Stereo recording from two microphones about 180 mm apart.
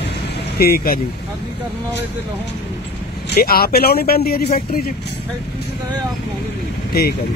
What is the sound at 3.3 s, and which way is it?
Speech, 55° left (ahead or behind).